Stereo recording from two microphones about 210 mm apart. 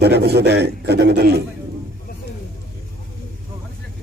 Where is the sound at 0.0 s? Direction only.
50° right (ahead or behind).